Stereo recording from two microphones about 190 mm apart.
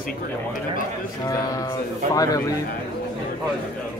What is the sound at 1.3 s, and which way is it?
Speech, 15° left (ahead or behind).